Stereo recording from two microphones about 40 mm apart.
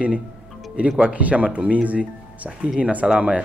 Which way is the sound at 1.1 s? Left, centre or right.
Right.